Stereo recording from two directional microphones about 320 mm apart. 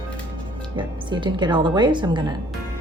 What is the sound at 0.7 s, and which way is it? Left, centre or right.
A woman's voice, centre.